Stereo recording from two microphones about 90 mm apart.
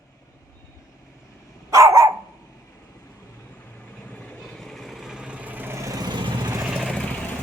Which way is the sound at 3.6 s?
15° left (ahead or behind).